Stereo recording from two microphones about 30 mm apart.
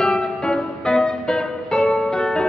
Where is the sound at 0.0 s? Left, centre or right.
Left.